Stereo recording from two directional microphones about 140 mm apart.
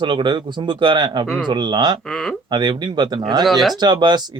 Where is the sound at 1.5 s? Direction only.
30° right (ahead or behind).